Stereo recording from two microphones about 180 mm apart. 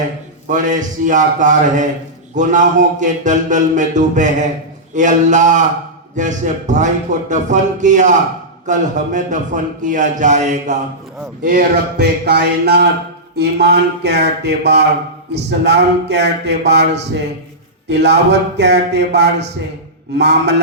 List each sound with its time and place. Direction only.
0.4 s music: 45° right (ahead or behind)
11.4 s speech: 60° right (ahead or behind)